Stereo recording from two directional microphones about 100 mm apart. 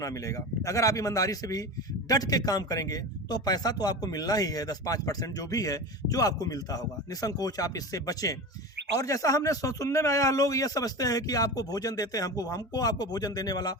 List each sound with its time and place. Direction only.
0.0 s a man's voice: 35° left (ahead or behind)